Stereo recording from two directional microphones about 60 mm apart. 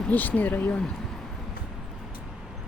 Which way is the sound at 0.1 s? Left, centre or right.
Left.